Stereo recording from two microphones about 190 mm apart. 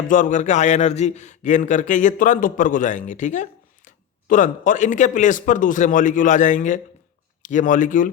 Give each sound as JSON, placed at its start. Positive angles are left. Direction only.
{"t": 0.1, "sound": "a man's voice", "side_deg": 40}